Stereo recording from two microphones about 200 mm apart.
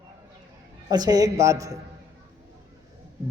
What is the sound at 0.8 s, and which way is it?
Speech, 20° right (ahead or behind).